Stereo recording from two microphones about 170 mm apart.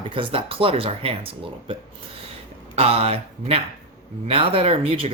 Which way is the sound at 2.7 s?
35° right (ahead or behind).